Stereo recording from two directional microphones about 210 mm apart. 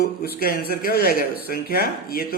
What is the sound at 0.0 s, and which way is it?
Speech, 45° left (ahead or behind).